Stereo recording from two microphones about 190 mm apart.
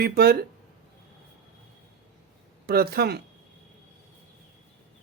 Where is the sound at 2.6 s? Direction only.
55° right (ahead or behind).